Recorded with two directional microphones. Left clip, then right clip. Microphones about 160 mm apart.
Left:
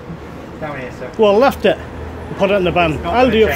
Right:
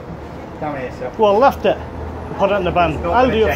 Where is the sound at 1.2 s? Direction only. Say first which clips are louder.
Left 1 dB; 45° left (ahead or behind).